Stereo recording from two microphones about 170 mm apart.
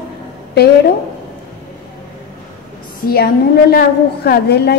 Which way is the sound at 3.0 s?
65° left (ahead or behind).